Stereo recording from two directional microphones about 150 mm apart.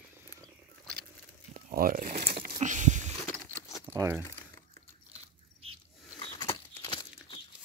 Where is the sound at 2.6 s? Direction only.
55° right (ahead or behind).